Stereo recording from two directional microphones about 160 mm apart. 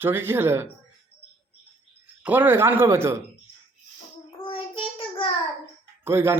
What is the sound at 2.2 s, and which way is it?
Speech, 10° right (ahead or behind).